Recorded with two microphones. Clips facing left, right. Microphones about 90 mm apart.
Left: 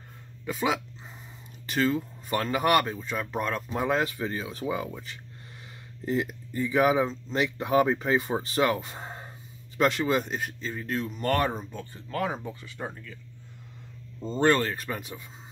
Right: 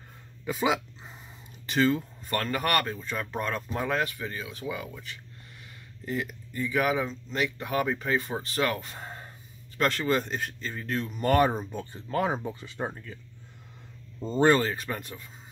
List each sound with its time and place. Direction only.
0.5 s speech: 5° right (ahead or behind)
2.2 s speech: 15° left (ahead or behind)
3.7 s speech: 20° left (ahead or behind); by 11.1 s 5° left (ahead or behind)
11.1 s speech: 10° right (ahead or behind); by 13.2 s 30° right (ahead or behind)
14.2 s speech: 10° right (ahead or behind); by 15.2 s 5° left (ahead or behind)